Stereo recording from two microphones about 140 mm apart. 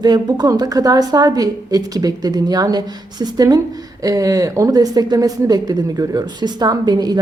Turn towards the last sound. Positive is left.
turn(degrees=-30)  # may be behind; listen again after turning